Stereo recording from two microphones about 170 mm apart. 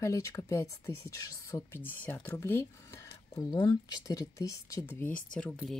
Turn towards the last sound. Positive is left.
turn(degrees=5)  # may be behind; listen again after turning